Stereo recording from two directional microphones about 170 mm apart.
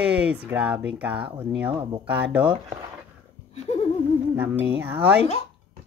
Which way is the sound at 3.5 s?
40° left (ahead or behind).